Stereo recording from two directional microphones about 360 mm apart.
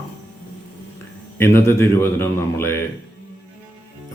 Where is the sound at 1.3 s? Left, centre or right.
Centre.